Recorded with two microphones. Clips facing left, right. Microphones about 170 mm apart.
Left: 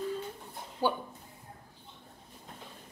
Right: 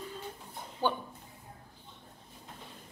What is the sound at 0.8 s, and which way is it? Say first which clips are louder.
Speech: left 1 dB; 10° left (ahead or behind).